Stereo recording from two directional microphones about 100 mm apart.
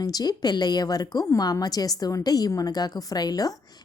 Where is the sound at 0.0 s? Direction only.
40° left (ahead or behind).